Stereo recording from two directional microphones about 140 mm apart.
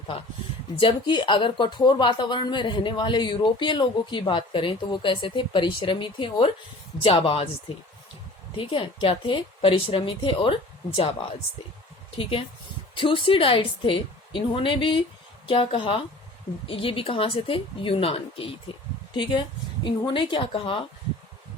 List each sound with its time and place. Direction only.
0.8 s speech: 35° left (ahead or behind)
8.5 s speech: 40° left (ahead or behind)
12.1 s speech: 40° left (ahead or behind)